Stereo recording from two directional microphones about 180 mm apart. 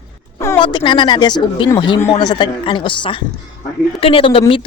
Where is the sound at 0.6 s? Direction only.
25° left (ahead or behind).